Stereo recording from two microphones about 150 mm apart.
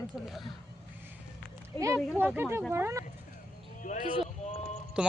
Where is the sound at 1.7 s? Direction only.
20° left (ahead or behind).